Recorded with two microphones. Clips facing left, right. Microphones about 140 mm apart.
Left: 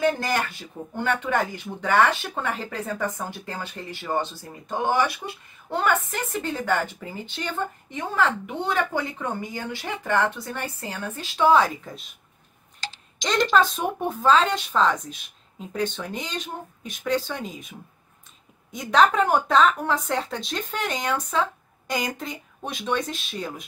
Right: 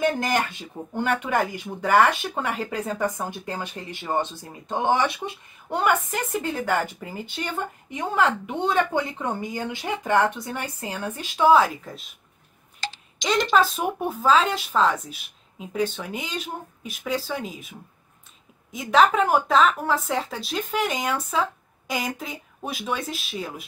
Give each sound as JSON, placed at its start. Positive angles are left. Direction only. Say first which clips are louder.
{"t": 0.0, "sound": "a woman's voice", "louder": "even", "side_deg": -20}
{"t": 5.8, "sound": "a woman's voice", "louder": "right 1 dB", "side_deg": -5}
{"t": 13.2, "sound": "speech", "louder": "even", "side_deg": -5}